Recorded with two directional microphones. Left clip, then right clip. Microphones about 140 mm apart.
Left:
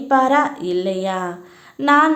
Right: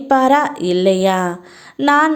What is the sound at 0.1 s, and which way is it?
Speech, 45° right (ahead or behind).